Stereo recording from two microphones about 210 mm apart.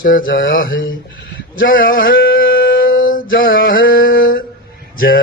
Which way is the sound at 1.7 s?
40° left (ahead or behind).